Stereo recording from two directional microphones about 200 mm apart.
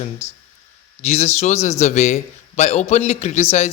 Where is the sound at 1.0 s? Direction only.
35° left (ahead or behind).